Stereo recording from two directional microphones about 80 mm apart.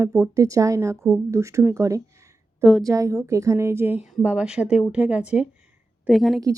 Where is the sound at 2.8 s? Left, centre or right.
Right.